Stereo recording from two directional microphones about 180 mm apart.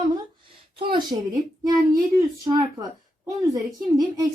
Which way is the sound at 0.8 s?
25° right (ahead or behind).